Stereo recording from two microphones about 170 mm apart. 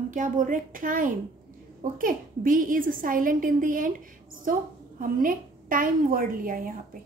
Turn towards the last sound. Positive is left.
turn(degrees=-55)  # may be behind; listen again after turning